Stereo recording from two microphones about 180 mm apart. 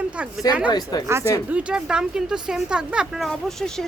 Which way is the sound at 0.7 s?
20° left (ahead or behind).